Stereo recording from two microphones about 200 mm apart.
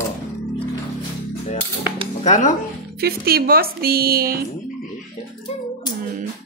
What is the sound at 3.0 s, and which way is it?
Speech, 50° right (ahead or behind).